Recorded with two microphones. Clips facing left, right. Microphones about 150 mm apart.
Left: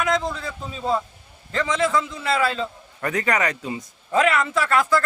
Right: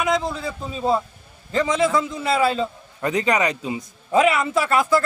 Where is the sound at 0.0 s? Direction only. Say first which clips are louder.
Right 1 dB; 5° right (ahead or behind).